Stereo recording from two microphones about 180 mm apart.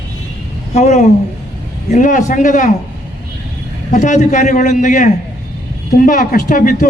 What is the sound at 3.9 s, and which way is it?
A man's voice, 45° left (ahead or behind).